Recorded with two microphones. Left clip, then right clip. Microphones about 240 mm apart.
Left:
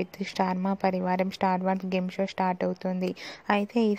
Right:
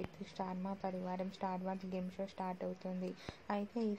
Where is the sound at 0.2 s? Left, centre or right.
Left.